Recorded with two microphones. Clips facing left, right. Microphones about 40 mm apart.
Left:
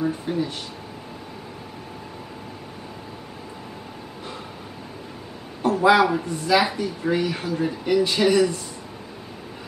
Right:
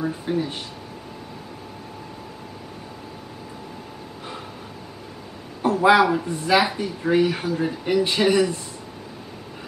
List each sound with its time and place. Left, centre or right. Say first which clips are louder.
0.0 s speech: even; centre
5.7 s a man's voice: right 1 dB; centre
6.2 s speech: right 1 dB; centre
6.6 s speech: even; centre